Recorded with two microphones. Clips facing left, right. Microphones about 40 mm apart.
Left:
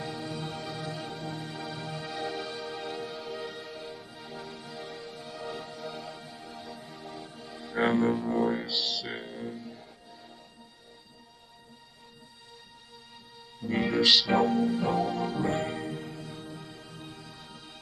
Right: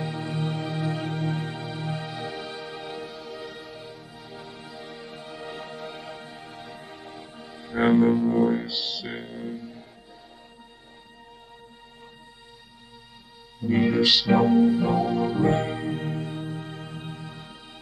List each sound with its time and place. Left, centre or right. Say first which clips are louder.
0.0 s music: right 6 dB; right
1.6 s music: right 4 dB; right; by 4.4 s centre
4.4 s music: even; centre
5.1 s music: right 2 dB; right
7.4 s music: right 5 dB; centre
13.6 s speech: right 5 dB; centre
15.4 s music: right 6 dB; centre
15.9 s music: right 8 dB; right